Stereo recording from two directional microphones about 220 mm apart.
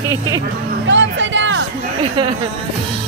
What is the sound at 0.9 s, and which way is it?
Speech, 55° right (ahead or behind).